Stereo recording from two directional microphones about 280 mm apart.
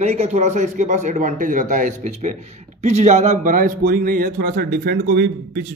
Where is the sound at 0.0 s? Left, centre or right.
Right.